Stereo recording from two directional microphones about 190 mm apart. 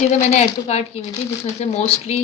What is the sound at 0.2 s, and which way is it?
Speech, 35° left (ahead or behind).